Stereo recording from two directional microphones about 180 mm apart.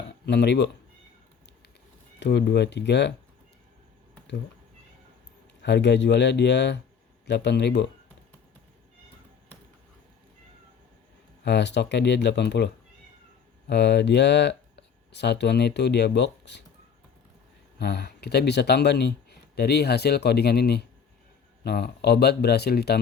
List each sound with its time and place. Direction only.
0.3 s speech: 70° left (ahead or behind)
2.1 s speech: 70° left (ahead or behind)
5.6 s speech: 70° left (ahead or behind)
11.4 s speech: 70° left (ahead or behind)
17.7 s speech: 65° left (ahead or behind)